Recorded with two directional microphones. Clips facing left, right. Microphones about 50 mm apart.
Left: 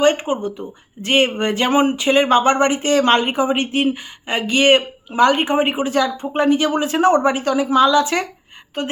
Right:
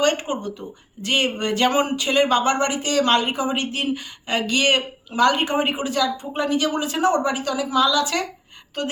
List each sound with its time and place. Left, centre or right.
0.0 s speech: left
5.9 s speech: left